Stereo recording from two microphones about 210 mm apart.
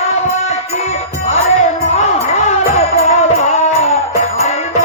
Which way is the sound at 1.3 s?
30° left (ahead or behind).